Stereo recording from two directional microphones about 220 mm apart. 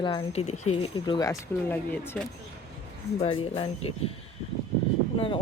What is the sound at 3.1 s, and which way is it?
Speech, 25° left (ahead or behind).